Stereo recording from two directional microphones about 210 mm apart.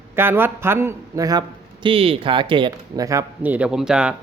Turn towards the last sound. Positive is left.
turn(degrees=-5)  # may be behind; listen again after turning